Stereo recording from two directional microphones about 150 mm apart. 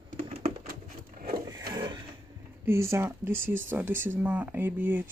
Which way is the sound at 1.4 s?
25° right (ahead or behind).